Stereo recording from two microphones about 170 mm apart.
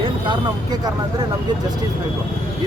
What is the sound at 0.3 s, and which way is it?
Speech, 25° right (ahead or behind).